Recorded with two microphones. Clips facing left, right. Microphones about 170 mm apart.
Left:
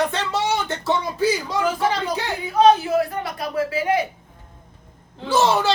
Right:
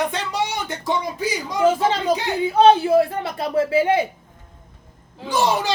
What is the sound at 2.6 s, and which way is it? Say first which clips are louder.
A woman's voice: right 2 dB; 30° right (ahead or behind).